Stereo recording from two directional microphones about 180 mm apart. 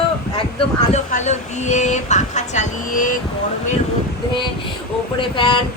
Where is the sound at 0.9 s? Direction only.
40° left (ahead or behind).